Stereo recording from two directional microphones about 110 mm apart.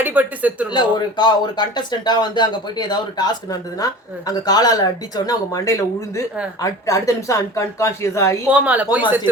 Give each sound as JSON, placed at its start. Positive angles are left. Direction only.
{"t": 0.0, "sound": "speech", "side_deg": -15}
{"t": 0.7, "sound": "speech", "side_deg": 40}
{"t": 8.4, "sound": "speech", "side_deg": -10}